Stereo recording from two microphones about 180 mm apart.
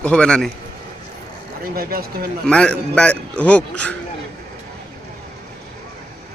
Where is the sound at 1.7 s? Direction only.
55° right (ahead or behind).